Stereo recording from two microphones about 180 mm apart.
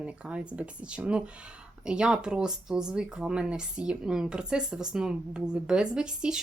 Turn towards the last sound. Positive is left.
turn(degrees=-5)  # may be behind; listen again after turning